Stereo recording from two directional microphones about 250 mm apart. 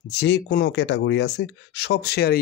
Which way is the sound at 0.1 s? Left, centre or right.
Left.